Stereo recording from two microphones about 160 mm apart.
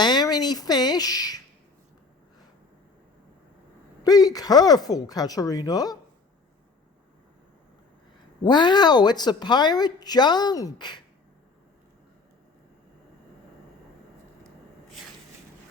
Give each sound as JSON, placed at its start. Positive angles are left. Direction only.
{"t": 0.0, "sound": "speech", "side_deg": 25}
{"t": 4.0, "sound": "speech", "side_deg": 25}
{"t": 8.4, "sound": "speech", "side_deg": 25}